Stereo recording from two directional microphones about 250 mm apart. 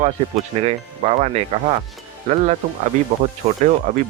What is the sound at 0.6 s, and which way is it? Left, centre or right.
Speech, right.